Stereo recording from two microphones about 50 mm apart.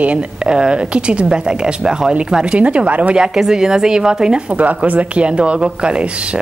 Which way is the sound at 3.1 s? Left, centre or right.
Centre.